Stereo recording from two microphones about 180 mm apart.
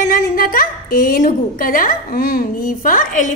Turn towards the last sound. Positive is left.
turn(degrees=45)  # may be behind; listen again after turning